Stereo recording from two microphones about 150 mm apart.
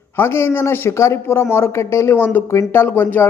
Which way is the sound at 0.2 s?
15° left (ahead or behind).